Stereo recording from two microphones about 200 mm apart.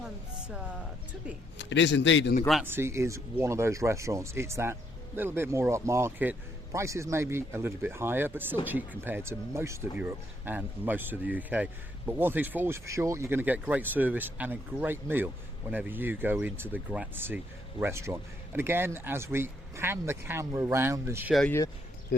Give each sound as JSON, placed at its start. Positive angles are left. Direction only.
{"t": 0.0, "sound": "music", "side_deg": -5}
{"t": 1.5, "sound": "a man's voice", "side_deg": 60}
{"t": 2.6, "sound": "speech", "side_deg": -10}
{"t": 21.3, "sound": "speech", "side_deg": 5}